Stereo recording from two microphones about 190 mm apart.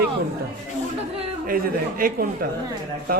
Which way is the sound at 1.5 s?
50° right (ahead or behind).